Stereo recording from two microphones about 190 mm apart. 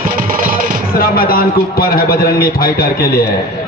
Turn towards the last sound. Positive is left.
turn(degrees=50)  # may be behind; listen again after turning